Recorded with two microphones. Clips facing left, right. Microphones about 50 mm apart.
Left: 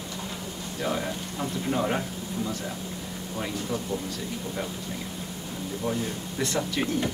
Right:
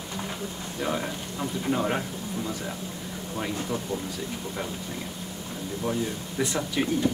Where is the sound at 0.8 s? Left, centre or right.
Centre.